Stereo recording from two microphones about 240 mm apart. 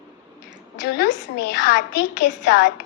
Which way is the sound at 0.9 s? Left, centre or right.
Left.